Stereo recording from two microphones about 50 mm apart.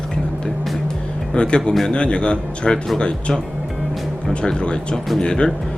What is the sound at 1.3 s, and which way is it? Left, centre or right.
Speech, centre.